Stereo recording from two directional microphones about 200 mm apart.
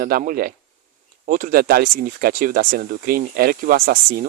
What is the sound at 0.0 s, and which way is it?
Speech, 45° right (ahead or behind).